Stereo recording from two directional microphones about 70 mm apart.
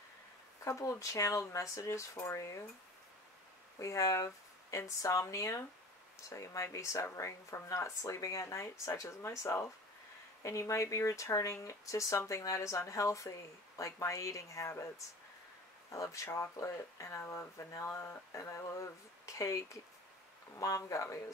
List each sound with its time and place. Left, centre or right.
0.7 s speech: left
3.8 s speech: left
15.9 s speech: left